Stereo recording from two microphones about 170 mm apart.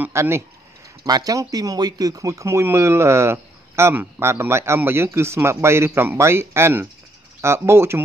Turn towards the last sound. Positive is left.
turn(degrees=-15)  # may be behind; listen again after turning